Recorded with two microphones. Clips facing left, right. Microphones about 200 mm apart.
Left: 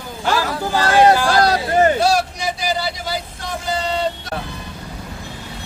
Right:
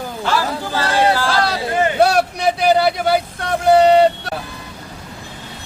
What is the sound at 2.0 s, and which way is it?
Vehicle, 60° right (ahead or behind).